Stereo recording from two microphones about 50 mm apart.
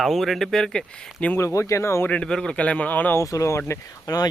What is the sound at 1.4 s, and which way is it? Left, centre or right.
Speech, left.